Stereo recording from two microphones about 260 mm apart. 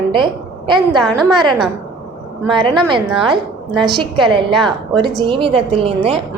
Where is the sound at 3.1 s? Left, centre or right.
Centre.